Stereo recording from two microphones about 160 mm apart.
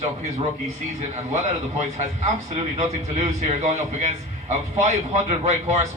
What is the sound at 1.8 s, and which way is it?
A man's voice, 45° right (ahead or behind).